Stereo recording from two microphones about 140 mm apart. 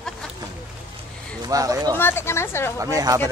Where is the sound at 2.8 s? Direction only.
25° right (ahead or behind).